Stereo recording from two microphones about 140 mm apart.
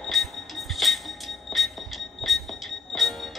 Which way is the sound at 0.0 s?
Centre (ahead or behind).